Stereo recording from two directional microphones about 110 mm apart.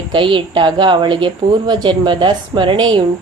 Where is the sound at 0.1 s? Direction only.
50° right (ahead or behind).